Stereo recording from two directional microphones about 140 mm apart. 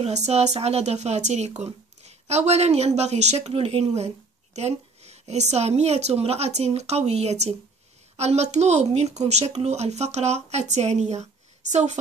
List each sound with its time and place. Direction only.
0.0 s speech: 50° right (ahead or behind)